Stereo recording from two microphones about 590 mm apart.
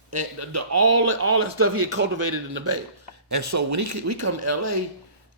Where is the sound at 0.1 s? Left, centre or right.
Right.